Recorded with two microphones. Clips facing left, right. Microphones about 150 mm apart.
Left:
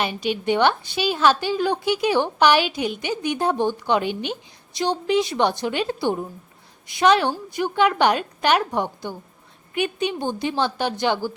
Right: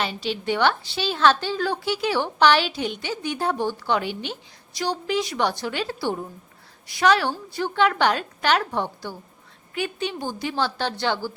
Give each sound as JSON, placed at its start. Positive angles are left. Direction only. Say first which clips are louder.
{"t": 0.0, "sound": "a woman's voice", "louder": "left 3 dB", "side_deg": 15}